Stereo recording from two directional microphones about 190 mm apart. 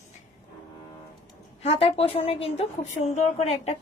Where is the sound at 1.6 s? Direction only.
30° left (ahead or behind).